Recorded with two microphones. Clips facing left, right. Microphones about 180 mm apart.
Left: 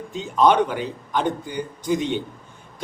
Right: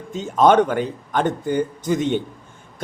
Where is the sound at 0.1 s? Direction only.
45° right (ahead or behind).